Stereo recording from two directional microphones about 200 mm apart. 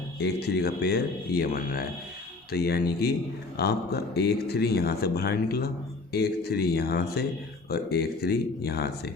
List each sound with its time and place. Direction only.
0.2 s speech: 55° left (ahead or behind)